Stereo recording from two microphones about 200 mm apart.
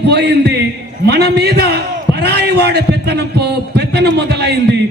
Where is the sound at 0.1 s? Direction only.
55° right (ahead or behind).